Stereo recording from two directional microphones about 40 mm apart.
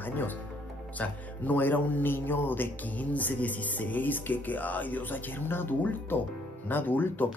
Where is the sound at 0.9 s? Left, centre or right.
Left.